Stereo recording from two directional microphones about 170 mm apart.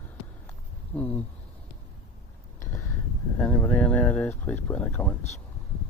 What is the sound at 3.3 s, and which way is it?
Speech, 10° left (ahead or behind).